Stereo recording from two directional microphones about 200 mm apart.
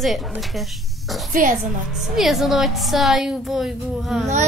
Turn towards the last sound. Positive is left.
turn(degrees=0)  # may be behind; listen again after turning